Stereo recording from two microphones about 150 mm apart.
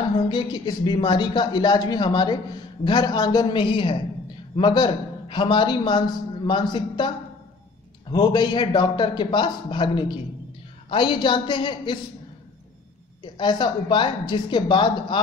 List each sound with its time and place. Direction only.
0.3 s a man's voice: 30° left (ahead or behind)
8.1 s a man's voice: 30° left (ahead or behind)
13.2 s a man's voice: 30° left (ahead or behind)